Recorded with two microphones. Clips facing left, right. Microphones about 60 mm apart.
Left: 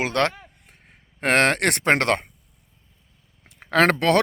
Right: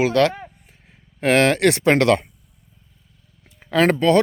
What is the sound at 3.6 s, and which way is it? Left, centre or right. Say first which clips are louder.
Speech: right 1 dB; left.